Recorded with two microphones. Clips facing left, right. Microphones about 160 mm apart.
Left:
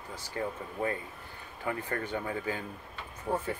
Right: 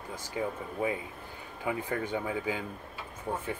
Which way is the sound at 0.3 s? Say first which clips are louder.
Right 1 dB; 10° right (ahead or behind).